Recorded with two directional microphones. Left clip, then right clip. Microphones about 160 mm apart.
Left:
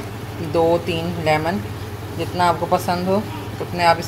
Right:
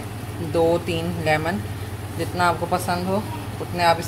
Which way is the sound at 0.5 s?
10° left (ahead or behind).